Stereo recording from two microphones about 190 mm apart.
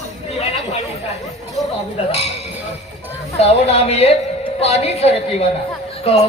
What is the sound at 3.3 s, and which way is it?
Speech, 35° left (ahead or behind).